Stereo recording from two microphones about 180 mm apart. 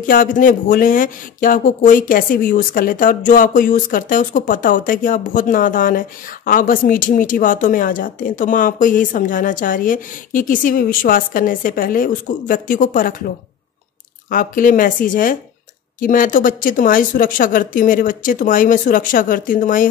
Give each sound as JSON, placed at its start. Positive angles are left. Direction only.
{"t": 0.0, "sound": "speech", "side_deg": 50}
{"t": 14.3, "sound": "speech", "side_deg": 50}